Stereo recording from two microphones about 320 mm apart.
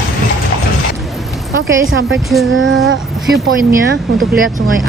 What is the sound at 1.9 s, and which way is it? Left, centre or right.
Child singing, right.